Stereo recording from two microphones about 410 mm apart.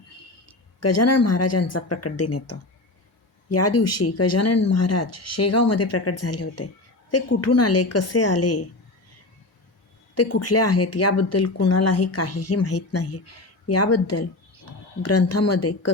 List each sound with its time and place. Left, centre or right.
0.4 s speech: left
10.2 s speech: left